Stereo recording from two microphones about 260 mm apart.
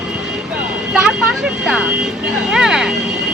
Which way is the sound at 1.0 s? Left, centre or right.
Centre.